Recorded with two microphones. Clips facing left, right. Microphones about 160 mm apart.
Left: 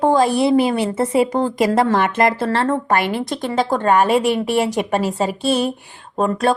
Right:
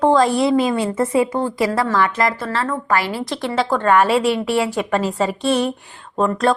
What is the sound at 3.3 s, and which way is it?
Speech, 45° left (ahead or behind).